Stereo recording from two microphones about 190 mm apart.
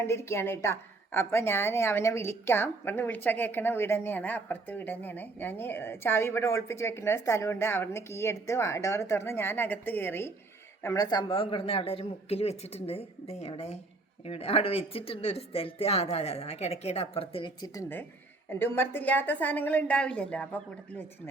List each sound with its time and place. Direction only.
0.0 s a woman's voice: 15° left (ahead or behind)
18.4 s a woman's voice: 10° left (ahead or behind)